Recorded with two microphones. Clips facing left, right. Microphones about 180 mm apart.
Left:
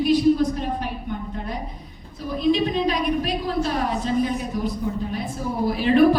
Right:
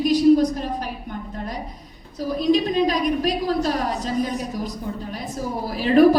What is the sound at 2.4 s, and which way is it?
A woman's voice, 40° right (ahead or behind).